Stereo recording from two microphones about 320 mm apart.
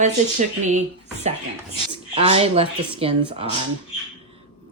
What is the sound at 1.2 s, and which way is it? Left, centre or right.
Speech, right.